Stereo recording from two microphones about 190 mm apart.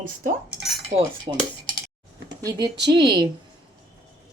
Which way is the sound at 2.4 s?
20° right (ahead or behind).